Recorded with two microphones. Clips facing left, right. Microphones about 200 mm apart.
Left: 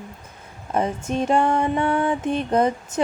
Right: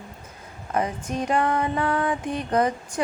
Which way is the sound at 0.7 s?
25° left (ahead or behind).